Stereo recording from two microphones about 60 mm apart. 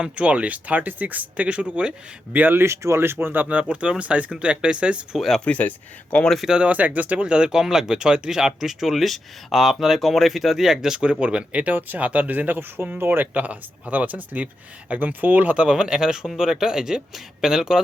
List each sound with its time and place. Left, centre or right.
0.0 s speech: right
2.3 s speech: right
2.6 s speech: right
3.5 s speech: centre
5.5 s speech: left
6.4 s speech: centre
6.7 s speech: right; by 17.8 s centre